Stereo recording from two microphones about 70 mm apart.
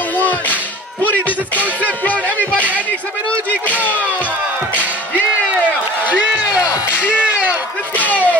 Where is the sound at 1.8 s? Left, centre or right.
Left.